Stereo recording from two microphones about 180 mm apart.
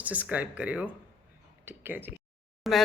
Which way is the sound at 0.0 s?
10° right (ahead or behind).